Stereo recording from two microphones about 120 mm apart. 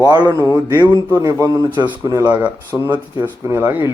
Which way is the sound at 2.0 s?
25° right (ahead or behind).